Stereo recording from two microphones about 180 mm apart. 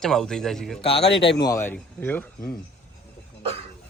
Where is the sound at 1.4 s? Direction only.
15° left (ahead or behind).